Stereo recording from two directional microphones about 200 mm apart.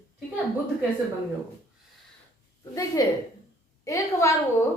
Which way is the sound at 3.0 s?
15° left (ahead or behind).